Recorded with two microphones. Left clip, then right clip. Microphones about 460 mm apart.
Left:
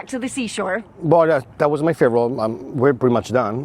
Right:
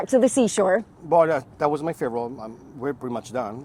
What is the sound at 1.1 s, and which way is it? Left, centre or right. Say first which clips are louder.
A man's voice: left 4 dB; left.